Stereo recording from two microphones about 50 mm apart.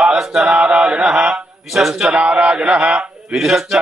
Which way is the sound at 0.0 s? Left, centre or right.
Centre.